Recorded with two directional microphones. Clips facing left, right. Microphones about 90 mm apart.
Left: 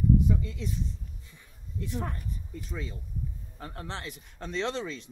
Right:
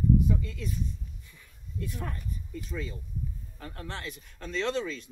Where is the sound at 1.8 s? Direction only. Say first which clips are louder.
Left 2 dB; 25° left (ahead or behind).